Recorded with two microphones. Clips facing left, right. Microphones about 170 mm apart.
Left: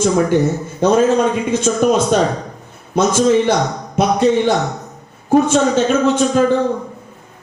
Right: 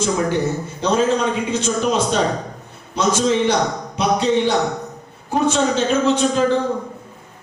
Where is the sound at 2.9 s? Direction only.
50° left (ahead or behind).